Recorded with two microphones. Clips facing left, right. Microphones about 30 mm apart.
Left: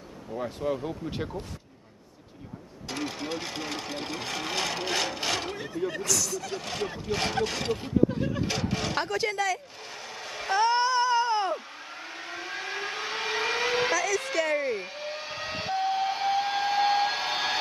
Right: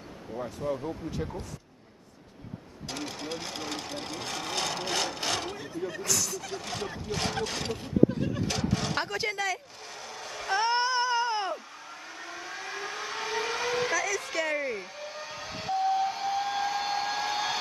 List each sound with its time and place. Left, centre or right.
0.4 s speech: left
3.0 s speech: centre; by 6.0 s left
6.0 s speech: centre
6.5 s speech: centre
8.9 s speech: centre
9.8 s a sound: left
10.5 s a sound: centre
11.5 s vehicle: left
13.9 s a sound: centre
14.3 s speech: centre
14.8 s vehicle: left